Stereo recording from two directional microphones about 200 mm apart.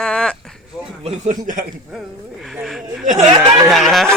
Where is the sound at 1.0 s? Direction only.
30° right (ahead or behind).